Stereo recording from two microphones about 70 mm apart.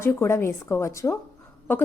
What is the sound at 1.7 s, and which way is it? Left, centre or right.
Speech, left.